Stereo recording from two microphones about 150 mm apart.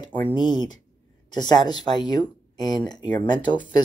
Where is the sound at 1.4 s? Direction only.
30° left (ahead or behind).